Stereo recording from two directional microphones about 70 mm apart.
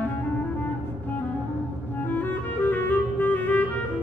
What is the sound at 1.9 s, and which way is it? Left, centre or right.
Clarinet, left.